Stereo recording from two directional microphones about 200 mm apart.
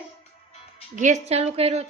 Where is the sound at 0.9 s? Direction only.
35° right (ahead or behind).